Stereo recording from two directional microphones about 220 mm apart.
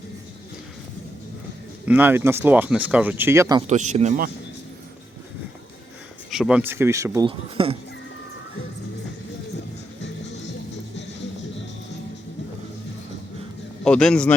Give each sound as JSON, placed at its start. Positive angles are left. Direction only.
{"t": 1.8, "sound": "speech", "side_deg": -10}
{"t": 3.7, "sound": "speech", "side_deg": -30}
{"t": 6.3, "sound": "speech", "side_deg": -5}
{"t": 13.8, "sound": "a man's voice", "side_deg": 5}